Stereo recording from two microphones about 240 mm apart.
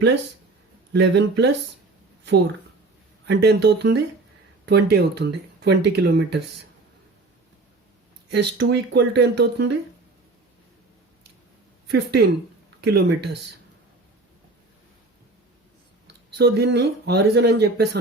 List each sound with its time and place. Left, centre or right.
0.9 s speech: right
3.2 s speech: right
8.5 s speech: right
11.9 s speech: right
16.4 s speech: right